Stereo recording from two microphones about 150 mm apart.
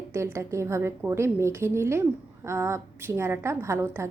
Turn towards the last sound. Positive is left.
turn(degrees=-15)  # may be behind; listen again after turning